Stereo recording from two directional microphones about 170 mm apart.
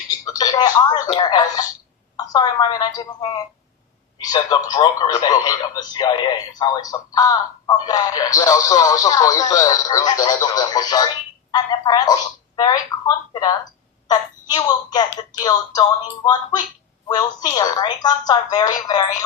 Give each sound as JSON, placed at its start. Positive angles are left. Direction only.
{"t": 0.1, "sound": "speech", "side_deg": 20}